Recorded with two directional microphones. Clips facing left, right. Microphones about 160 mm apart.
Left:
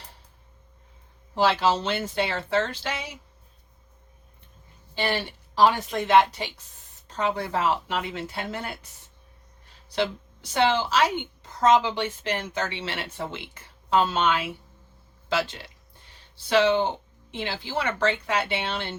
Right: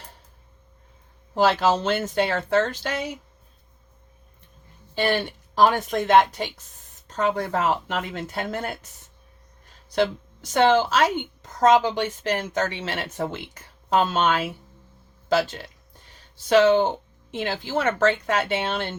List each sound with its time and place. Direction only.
1.4 s speech: 50° right (ahead or behind)
5.5 s speech: 50° right (ahead or behind)
9.9 s speech: 50° right (ahead or behind)